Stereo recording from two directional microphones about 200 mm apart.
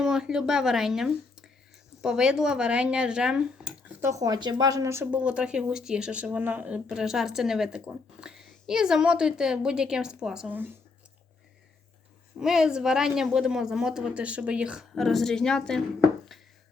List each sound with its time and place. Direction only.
0.0 s speech: centre (ahead or behind)
2.0 s dishes: 5° right (ahead or behind)
12.4 s dishes: 5° right (ahead or behind)
16.3 s a sound: centre (ahead or behind)